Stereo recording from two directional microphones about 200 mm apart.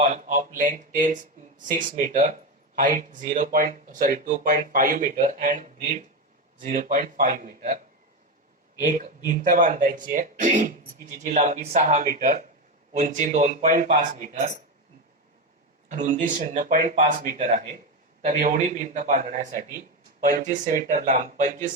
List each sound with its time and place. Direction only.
0.0 s speech: 45° right (ahead or behind)
8.8 s speech: 45° right (ahead or behind)
15.9 s speech: 40° right (ahead or behind)